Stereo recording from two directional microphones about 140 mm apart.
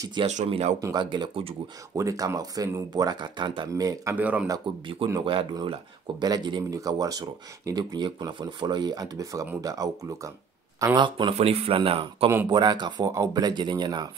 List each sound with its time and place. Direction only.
0.0 s speech: 30° right (ahead or behind)
0.5 s speech: 45° right (ahead or behind)
0.7 s speech: 30° right (ahead or behind)
2.0 s speech: 25° right (ahead or behind)
4.1 s speech: 10° right (ahead or behind)
5.1 s speech: 40° right (ahead or behind)
11.0 s speech: 35° right (ahead or behind)
11.3 s speech: 45° right (ahead or behind)